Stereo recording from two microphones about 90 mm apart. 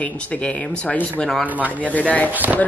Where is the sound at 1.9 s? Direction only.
15° left (ahead or behind).